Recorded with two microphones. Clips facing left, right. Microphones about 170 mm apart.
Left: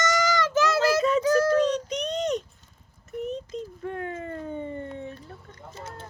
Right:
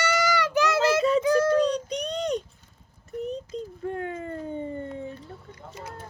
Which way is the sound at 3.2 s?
35° right (ahead or behind).